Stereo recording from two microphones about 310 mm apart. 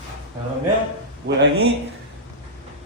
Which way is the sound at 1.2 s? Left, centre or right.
Right.